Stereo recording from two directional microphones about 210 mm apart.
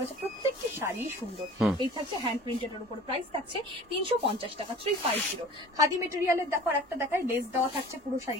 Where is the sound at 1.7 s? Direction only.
20° right (ahead or behind).